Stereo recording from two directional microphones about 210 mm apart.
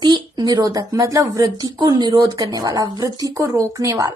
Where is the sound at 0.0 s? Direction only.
20° right (ahead or behind).